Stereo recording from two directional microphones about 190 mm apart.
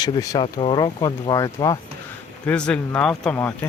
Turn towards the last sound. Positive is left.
turn(degrees=10)  # may be behind; listen again after turning